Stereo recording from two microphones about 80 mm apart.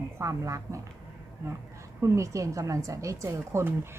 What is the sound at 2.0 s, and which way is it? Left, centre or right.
A woman's voice, right.